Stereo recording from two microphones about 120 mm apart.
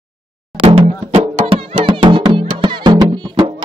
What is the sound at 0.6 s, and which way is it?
Music, 50° right (ahead or behind).